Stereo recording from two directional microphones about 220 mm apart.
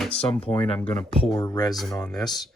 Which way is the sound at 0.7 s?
5° left (ahead or behind).